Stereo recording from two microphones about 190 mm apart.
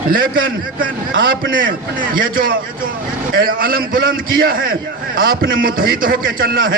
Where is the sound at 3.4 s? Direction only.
50° right (ahead or behind).